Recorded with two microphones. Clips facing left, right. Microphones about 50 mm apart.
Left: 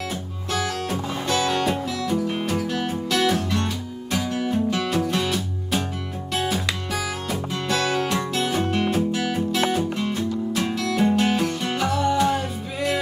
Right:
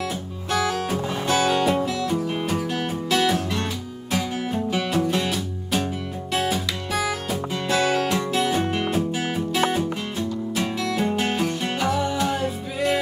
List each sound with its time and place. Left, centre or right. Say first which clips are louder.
0.5 s music: right 3 dB; centre
6.3 s music: even; centre